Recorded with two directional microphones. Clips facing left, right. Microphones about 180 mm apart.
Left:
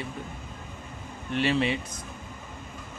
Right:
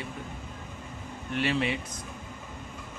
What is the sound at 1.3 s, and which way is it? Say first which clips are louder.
Speech: left 3 dB; 30° left (ahead or behind).